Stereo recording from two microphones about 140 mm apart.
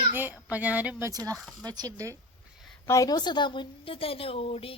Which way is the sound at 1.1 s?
25° right (ahead or behind).